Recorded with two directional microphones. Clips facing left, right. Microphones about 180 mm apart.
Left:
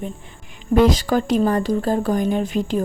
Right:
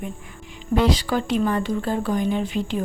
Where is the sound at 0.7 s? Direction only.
45° left (ahead or behind).